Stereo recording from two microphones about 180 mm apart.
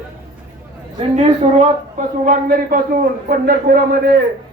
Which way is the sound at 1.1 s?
35° right (ahead or behind).